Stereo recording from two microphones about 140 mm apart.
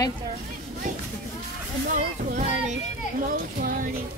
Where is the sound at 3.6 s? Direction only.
85° right.